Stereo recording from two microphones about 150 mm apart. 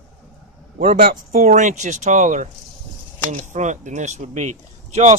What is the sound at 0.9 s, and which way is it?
Speech, 75° right (ahead or behind).